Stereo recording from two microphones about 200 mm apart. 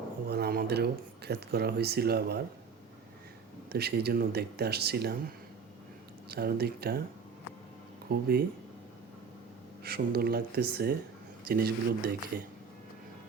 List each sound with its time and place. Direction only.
0.3 s speech: 50° right (ahead or behind)
3.7 s speech: 50° right (ahead or behind)
6.2 s speech: 50° right (ahead or behind)
8.1 s speech: 50° right (ahead or behind)
9.8 s speech: 50° right (ahead or behind)